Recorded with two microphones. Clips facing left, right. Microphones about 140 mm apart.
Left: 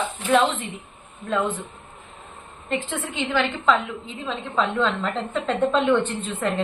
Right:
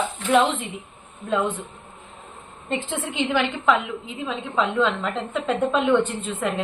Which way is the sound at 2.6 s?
20° right (ahead or behind).